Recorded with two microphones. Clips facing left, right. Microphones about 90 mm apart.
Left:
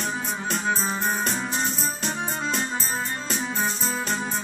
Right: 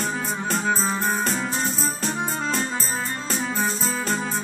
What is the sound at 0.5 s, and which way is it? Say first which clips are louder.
Music: right 2 dB; 35° right (ahead or behind).